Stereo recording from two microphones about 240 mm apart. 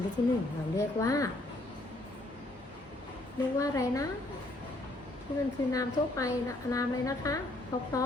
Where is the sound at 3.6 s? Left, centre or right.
Centre.